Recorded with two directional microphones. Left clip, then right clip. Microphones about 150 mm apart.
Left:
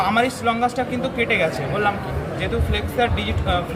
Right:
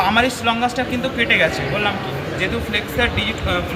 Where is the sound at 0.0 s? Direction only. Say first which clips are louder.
Right 2 dB; 15° left (ahead or behind).